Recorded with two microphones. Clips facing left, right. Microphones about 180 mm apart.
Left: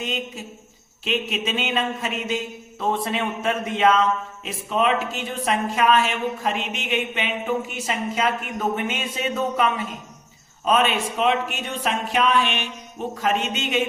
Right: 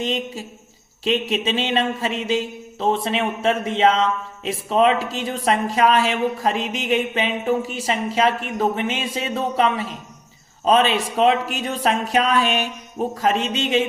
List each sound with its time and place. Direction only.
0.0 s speech: 30° right (ahead or behind)